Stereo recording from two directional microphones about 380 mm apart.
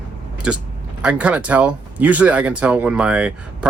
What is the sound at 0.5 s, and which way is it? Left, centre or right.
Speech, centre.